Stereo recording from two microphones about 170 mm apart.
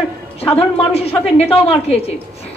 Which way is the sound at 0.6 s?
35° left (ahead or behind).